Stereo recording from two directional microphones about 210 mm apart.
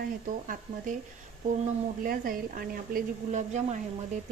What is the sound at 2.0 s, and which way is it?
Speech, 45° right (ahead or behind).